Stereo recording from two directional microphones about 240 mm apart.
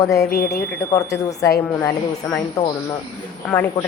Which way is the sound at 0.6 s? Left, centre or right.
Centre.